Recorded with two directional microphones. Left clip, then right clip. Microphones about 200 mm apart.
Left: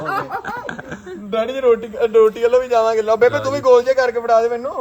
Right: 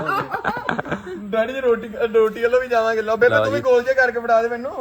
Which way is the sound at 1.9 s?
35° left (ahead or behind).